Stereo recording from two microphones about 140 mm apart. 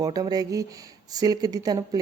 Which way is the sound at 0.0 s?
25° right (ahead or behind).